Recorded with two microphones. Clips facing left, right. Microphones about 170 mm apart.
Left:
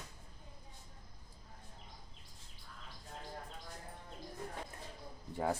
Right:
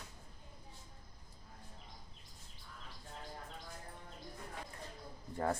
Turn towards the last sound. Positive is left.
turn(degrees=0)  # may be behind; listen again after turning